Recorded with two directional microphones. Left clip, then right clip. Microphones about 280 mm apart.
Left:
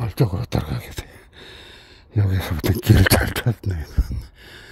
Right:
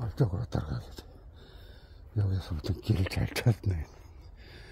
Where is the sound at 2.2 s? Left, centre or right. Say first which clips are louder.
Left 13 dB; left.